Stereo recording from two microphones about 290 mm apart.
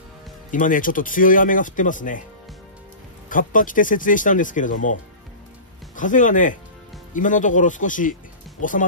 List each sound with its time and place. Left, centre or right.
0.5 s speech: left
3.3 s speech: left
5.9 s speech: left